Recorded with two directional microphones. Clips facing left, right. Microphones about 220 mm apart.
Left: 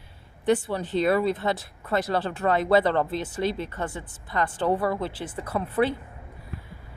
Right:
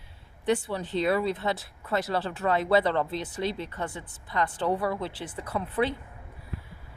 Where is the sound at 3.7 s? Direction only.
45° left (ahead or behind).